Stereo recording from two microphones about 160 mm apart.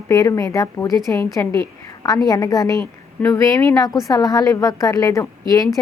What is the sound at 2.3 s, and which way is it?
A woman's voice, 20° left (ahead or behind).